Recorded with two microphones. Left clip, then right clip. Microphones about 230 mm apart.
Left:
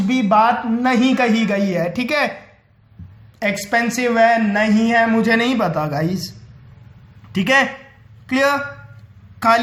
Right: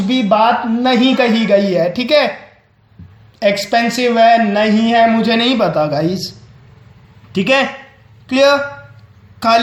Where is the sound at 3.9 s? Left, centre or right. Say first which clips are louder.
Right 5 dB; left.